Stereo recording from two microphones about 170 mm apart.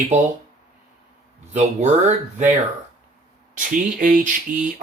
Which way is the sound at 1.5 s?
40° right (ahead or behind).